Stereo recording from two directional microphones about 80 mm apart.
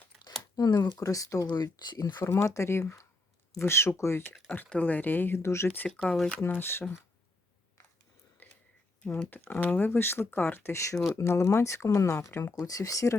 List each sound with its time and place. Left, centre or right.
0.5 s speech: left
1.5 s speech: left
2.2 s speech: left
4.4 s speech: left
5.6 s speech: left
5.9 s speech: centre
6.4 s speech: left
9.0 s speech: centre; by 12.6 s left
12.6 s speech: left